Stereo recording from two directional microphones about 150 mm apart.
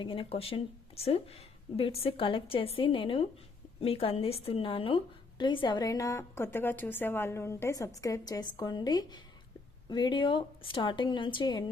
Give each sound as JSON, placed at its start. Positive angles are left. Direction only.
{"t": 0.0, "sound": "a woman's voice", "side_deg": 35}